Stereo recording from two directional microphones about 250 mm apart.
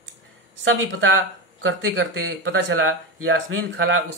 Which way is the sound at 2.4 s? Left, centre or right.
Right.